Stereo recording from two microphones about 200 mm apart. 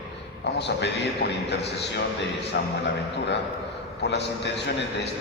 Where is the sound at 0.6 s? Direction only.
60° left (ahead or behind).